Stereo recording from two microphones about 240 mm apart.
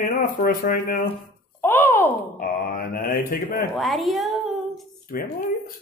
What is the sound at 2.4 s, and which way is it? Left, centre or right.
Speech, left.